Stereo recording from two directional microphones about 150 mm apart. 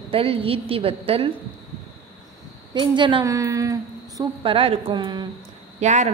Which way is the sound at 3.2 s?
20° right (ahead or behind).